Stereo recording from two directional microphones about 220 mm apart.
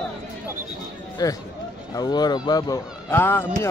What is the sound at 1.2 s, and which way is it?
Speech, 15° left (ahead or behind).